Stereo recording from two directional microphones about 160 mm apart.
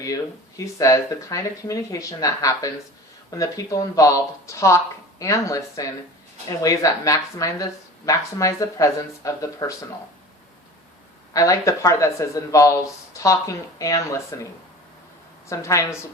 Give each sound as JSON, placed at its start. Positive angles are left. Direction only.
{"t": 0.0, "sound": "speech", "side_deg": 20}
{"t": 11.3, "sound": "speech", "side_deg": 20}
{"t": 15.4, "sound": "speech", "side_deg": 20}